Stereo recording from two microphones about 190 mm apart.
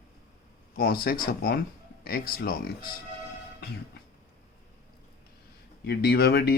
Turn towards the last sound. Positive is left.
turn(degrees=55)  # may be behind; listen again after turning